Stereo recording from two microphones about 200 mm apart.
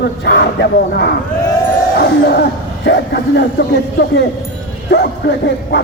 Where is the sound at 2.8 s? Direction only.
60° left (ahead or behind).